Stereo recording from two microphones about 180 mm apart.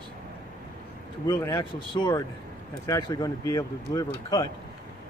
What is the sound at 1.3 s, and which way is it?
Speech, 15° left (ahead or behind).